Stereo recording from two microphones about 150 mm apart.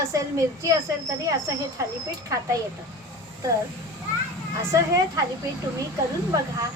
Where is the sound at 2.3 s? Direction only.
20° right (ahead or behind).